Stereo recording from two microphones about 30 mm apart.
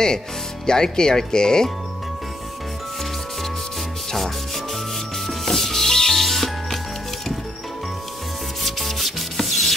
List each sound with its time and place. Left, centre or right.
0.7 s speech: left
5.2 s music: centre
8.6 s rub: centre